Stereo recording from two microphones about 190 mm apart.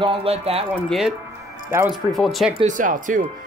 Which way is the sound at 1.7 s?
15° right (ahead or behind).